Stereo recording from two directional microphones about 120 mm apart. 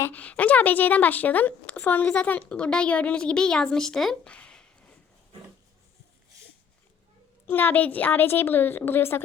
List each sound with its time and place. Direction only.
0.0 s a woman's voice: 15° left (ahead or behind)
7.4 s a woman's voice: 15° left (ahead or behind)